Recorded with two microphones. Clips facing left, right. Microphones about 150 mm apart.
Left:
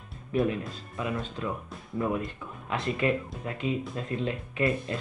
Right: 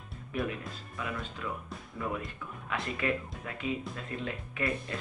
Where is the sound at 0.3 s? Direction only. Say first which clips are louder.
Left 7 dB; 25° left (ahead or behind).